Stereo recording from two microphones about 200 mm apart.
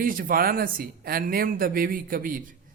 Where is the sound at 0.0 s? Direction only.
45° right (ahead or behind).